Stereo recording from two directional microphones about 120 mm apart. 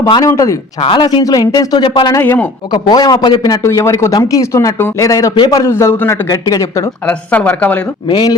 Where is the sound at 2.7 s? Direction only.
35° left (ahead or behind).